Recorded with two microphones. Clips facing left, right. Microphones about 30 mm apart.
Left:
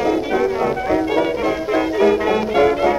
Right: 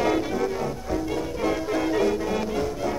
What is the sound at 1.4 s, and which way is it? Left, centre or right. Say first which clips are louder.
Music: left 6 dB; left.